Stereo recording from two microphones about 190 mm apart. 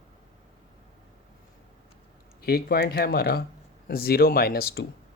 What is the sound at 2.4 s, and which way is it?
Speech, 55° left (ahead or behind).